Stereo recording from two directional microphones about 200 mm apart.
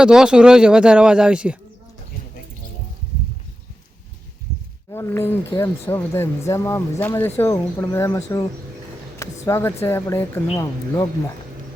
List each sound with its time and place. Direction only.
0.0 s speech: 5° right (ahead or behind)
4.9 s speech: 10° left (ahead or behind)
9.5 s speech: 10° left (ahead or behind)